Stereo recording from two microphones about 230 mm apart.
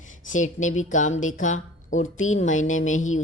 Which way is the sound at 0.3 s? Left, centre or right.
Left.